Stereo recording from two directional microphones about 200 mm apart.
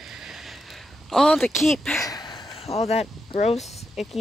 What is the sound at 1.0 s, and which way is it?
Speech, centre (ahead or behind).